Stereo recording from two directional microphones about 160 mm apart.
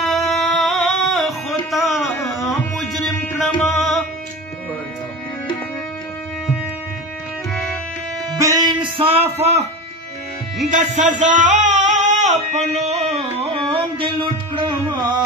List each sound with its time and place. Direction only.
0.0 s music: centre (ahead or behind)
8.4 s music: 25° right (ahead or behind); by 9.7 s 40° right (ahead or behind)
10.7 s music: 50° right (ahead or behind); by 15.2 s 30° right (ahead or behind)